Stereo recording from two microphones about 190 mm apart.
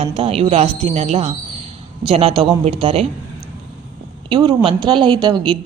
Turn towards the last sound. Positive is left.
turn(degrees=-25)  # may be behind; listen again after turning